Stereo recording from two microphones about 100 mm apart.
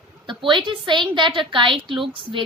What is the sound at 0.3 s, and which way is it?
A woman's voice, 55° right (ahead or behind).